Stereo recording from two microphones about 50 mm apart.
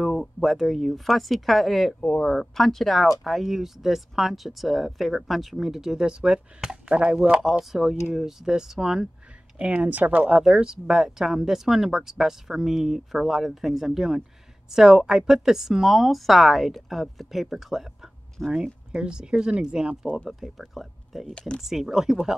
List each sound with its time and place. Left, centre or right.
0.4 s speech: centre
6.7 s speech: centre
7.4 s speech: centre
9.6 s speech: right
10.3 s speech: centre
18.6 s speech: centre
20.2 s speech: centre